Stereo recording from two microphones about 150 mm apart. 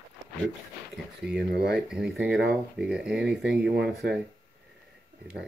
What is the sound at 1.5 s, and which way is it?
Speech, 90° right.